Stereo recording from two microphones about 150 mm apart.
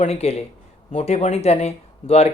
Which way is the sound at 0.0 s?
45° left (ahead or behind).